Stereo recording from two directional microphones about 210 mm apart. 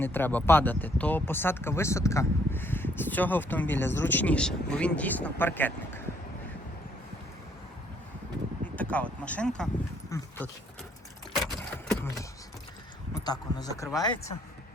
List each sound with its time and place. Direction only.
0.0 s speech: 10° left (ahead or behind)
8.6 s speech: 5° left (ahead or behind)
13.1 s speech: 20° left (ahead or behind)